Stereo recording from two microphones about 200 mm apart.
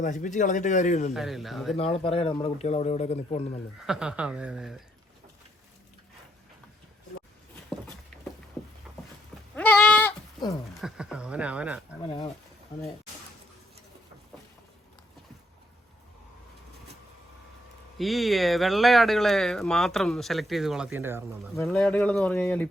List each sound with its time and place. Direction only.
0.0 s a man's voice: 40° left (ahead or behind)
1.1 s speech: centre (ahead or behind)
1.7 s a man's voice: 30° left (ahead or behind)
3.8 s speech: 5° right (ahead or behind)
9.6 s goat: 10° left (ahead or behind)
10.8 s speech: 5° right (ahead or behind)
17.9 s speech: centre (ahead or behind)
21.5 s speech: 5° left (ahead or behind)